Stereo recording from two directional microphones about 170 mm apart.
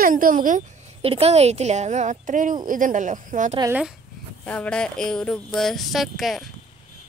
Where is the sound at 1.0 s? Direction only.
35° right (ahead or behind).